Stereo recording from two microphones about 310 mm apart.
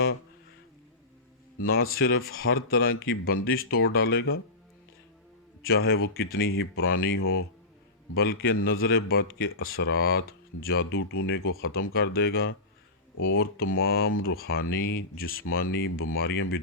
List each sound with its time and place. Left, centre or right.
1.5 s a man's voice: left
1.8 s speech: left
5.6 s speech: left
8.1 s speech: left
9.4 s speech: left
9.6 s speech: left